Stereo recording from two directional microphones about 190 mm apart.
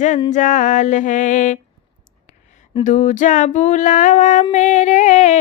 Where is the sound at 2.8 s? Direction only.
40° left (ahead or behind).